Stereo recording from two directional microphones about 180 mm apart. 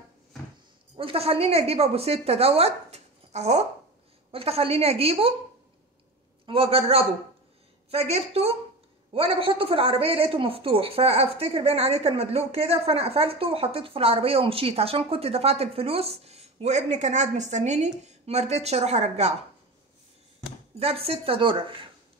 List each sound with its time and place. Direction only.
0.9 s a woman's voice: 30° right (ahead or behind)
6.4 s a woman's voice: 30° right (ahead or behind)
20.8 s a woman's voice: 35° right (ahead or behind)